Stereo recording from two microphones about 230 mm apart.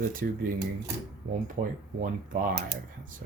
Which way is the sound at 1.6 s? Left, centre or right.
Right.